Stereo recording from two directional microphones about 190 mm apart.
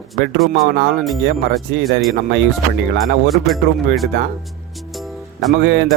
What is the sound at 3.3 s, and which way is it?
Speech, centre (ahead or behind).